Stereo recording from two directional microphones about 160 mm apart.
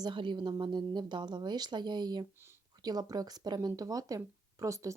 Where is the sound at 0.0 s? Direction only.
30° right (ahead or behind).